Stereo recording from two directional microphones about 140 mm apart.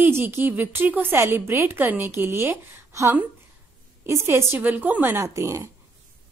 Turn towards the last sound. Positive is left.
turn(degrees=-20)  # may be behind; listen again after turning